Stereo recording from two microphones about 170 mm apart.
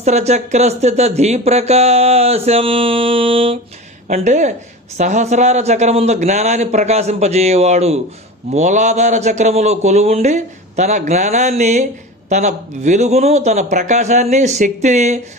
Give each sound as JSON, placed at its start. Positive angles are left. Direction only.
{"t": 0.0, "sound": "speech", "side_deg": -40}
{"t": 4.1, "sound": "a man's voice", "side_deg": -45}